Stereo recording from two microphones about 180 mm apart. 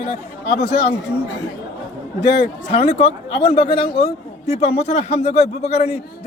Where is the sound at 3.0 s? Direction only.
30° left (ahead or behind).